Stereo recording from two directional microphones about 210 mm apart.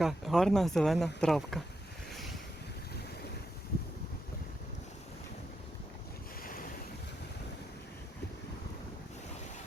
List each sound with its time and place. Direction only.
0.0 s speech: centre (ahead or behind)
6.4 s waves: 45° left (ahead or behind)